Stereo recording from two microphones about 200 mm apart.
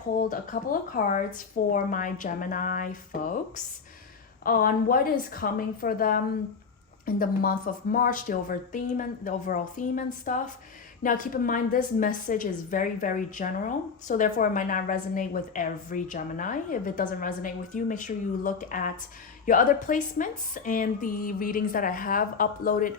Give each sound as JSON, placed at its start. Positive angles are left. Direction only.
{"t": 0.2, "sound": "a woman's voice", "side_deg": 45}